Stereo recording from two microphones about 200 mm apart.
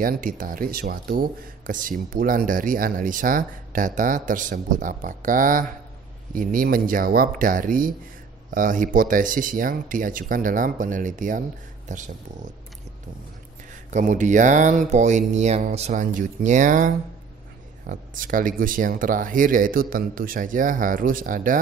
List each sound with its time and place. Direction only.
0.0 s speech: 45° right (ahead or behind)
13.8 s speech: 40° right (ahead or behind)